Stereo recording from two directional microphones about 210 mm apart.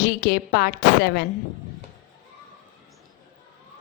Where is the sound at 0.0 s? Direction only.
45° left (ahead or behind).